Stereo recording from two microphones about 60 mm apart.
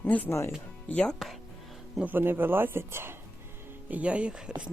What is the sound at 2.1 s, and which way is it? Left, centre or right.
Speech, right.